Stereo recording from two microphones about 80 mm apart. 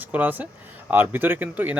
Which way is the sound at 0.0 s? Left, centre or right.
Right.